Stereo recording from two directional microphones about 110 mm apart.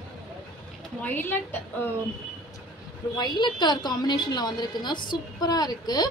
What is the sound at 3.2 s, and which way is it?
A woman's voice, 40° left (ahead or behind).